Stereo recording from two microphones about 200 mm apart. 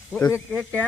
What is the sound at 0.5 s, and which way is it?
Speech, 5° left (ahead or behind).